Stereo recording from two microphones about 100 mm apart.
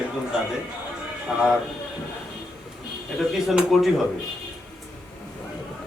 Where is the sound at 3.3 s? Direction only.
Centre (ahead or behind).